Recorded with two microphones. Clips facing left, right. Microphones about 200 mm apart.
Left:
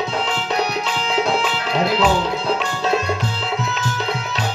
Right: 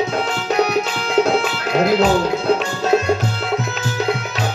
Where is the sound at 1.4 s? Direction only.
45° right (ahead or behind).